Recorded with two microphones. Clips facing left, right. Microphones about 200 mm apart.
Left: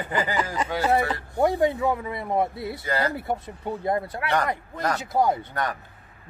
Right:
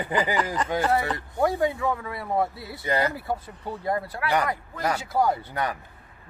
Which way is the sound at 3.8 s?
20° left (ahead or behind).